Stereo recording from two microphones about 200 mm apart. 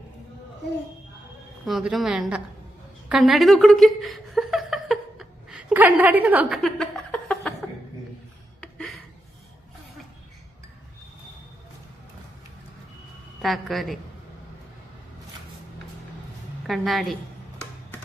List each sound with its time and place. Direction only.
1.6 s a woman's voice: centre (ahead or behind)
3.1 s chuckle: centre (ahead or behind)
6.6 s a sound: 5° left (ahead or behind)
8.6 s a sound: centre (ahead or behind)
13.4 s a woman's voice: centre (ahead or behind)
16.6 s a woman's voice: centre (ahead or behind)